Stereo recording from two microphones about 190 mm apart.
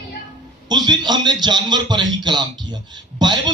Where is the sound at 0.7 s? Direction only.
25° right (ahead or behind).